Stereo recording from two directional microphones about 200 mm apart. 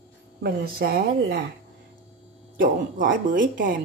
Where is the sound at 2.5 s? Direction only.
45° right (ahead or behind).